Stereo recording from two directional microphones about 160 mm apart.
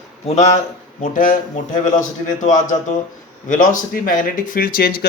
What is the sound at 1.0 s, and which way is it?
A man's voice, 55° left (ahead or behind).